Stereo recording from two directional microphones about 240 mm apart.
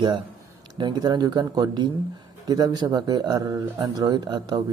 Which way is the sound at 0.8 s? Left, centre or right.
Centre.